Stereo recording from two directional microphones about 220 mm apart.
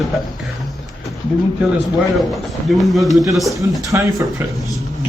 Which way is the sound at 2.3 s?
Centre (ahead or behind).